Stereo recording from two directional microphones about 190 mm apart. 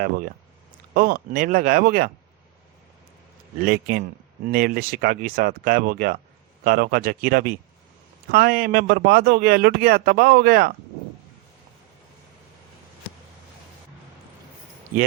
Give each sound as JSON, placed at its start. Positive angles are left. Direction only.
{"t": 0.9, "sound": "a man's voice", "side_deg": -50}
{"t": 3.6, "sound": "a man's voice", "side_deg": -50}